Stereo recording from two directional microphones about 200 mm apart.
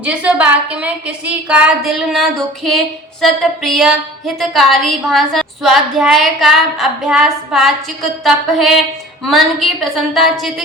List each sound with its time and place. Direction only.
0.0 s a woman's voice: 5° right (ahead or behind)